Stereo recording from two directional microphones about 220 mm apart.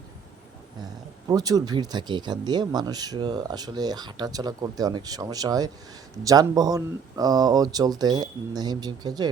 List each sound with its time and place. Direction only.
1.3 s speech: 15° right (ahead or behind)